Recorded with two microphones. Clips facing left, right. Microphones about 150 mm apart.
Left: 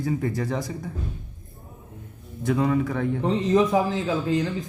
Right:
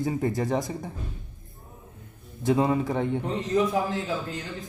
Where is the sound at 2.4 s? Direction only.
25° right (ahead or behind).